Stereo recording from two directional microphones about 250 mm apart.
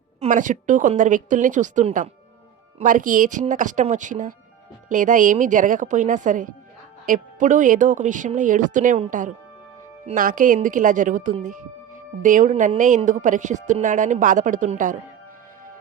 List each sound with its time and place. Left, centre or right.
0.2 s a woman's voice: right